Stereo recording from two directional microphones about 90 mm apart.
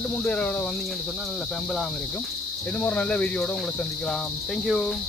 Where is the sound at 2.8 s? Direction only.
15° left (ahead or behind).